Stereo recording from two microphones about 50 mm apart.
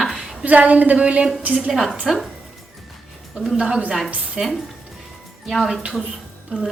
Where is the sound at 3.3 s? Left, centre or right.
Centre.